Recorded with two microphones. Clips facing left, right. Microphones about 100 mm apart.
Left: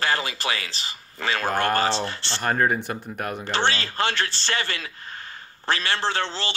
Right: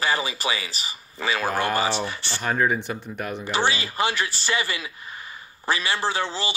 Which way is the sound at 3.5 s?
10° right (ahead or behind).